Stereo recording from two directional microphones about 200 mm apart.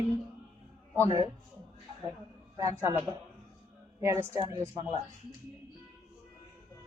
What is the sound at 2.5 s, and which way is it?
Speech, 15° right (ahead or behind).